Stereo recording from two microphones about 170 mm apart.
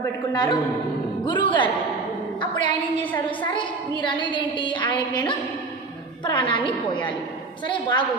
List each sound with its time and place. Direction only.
0.0 s a woman's voice: 25° left (ahead or behind)
3.0 s a woman's voice: 10° left (ahead or behind)
3.2 s a woman's voice: 25° left (ahead or behind)
6.2 s a woman's voice: 30° left (ahead or behind)